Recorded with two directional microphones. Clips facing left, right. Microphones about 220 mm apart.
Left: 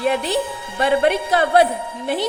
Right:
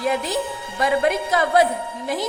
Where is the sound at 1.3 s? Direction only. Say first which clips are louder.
Left 2 dB; 65° left (ahead or behind).